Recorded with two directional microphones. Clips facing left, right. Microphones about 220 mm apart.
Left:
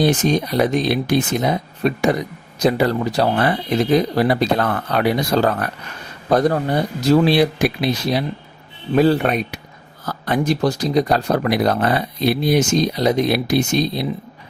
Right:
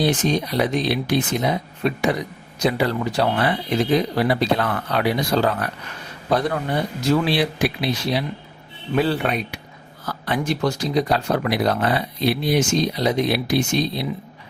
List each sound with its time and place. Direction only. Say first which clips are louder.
0.0 s speech: left 3 dB; 45° left (ahead or behind)